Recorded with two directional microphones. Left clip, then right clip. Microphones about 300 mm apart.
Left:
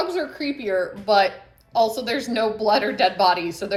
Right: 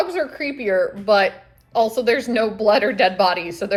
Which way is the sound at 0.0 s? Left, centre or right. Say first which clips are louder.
Right 3 dB; centre.